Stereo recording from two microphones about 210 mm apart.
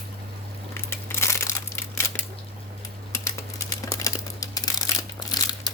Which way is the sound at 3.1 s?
15° left (ahead or behind).